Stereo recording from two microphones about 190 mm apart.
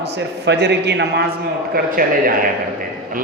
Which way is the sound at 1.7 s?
50° right (ahead or behind).